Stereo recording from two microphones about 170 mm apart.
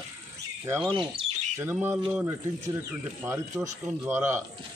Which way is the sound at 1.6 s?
10° right (ahead or behind).